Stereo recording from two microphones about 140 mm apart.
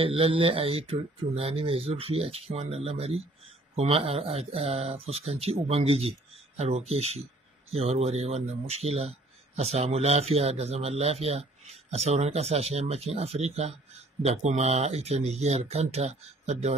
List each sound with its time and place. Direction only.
0.0 s speech: 45° right (ahead or behind)